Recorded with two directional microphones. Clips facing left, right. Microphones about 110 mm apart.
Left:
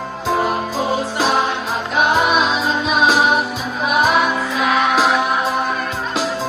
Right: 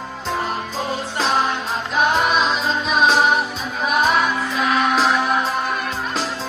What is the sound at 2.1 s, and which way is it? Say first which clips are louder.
Music: left 3 dB; 5° left (ahead or behind).